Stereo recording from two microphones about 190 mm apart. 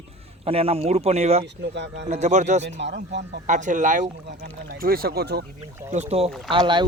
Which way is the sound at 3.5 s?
40° right (ahead or behind).